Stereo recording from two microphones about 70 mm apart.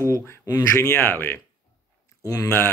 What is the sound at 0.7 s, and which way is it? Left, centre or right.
Speech, left.